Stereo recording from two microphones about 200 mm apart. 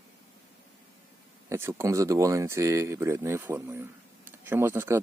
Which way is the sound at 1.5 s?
15° right (ahead or behind).